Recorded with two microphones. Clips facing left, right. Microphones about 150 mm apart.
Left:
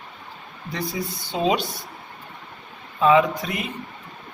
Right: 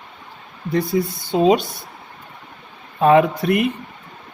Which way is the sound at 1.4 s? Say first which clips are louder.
Right 6 dB; 45° right (ahead or behind).